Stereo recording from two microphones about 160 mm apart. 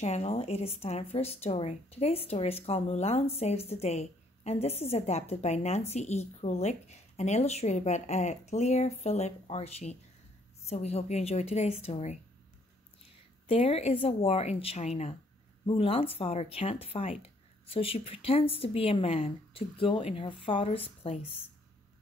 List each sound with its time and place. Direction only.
0.0 s speech: 45° left (ahead or behind)
13.5 s speech: 35° left (ahead or behind)